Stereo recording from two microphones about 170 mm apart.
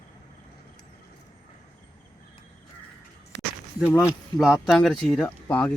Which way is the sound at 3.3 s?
90° right.